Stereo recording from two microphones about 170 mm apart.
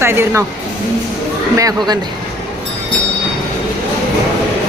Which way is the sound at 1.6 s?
20° right (ahead or behind).